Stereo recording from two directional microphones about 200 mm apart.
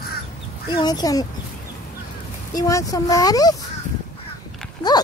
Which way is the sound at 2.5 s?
15° left (ahead or behind).